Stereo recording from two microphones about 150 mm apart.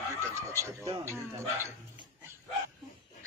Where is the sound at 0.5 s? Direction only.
20° right (ahead or behind).